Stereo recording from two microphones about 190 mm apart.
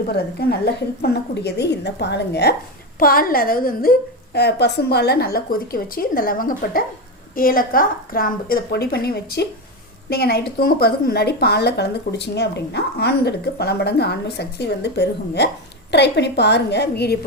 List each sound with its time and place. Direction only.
0.1 s a woman's voice: 55° left (ahead or behind)
3.0 s a woman's voice: 50° left (ahead or behind)
4.4 s a woman's voice: 60° left (ahead or behind)